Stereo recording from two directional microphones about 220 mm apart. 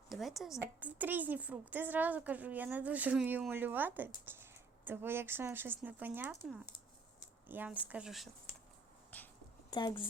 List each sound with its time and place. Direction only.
0.1 s a woman's voice: centre (ahead or behind)
9.0 s a sound: 5° left (ahead or behind)
9.6 s speech: 20° left (ahead or behind)